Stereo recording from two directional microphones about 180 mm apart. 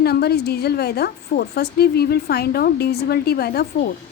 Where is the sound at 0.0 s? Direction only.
60° left (ahead or behind).